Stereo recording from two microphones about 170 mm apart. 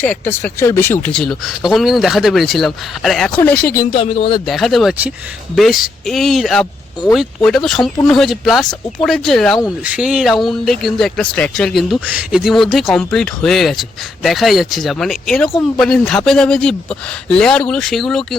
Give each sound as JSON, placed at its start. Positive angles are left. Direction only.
{"t": 0.0, "sound": "speech", "side_deg": 10}
{"t": 1.0, "sound": "speech", "side_deg": 5}
{"t": 3.9, "sound": "speech", "side_deg": 35}
{"t": 4.4, "sound": "speech", "side_deg": 0}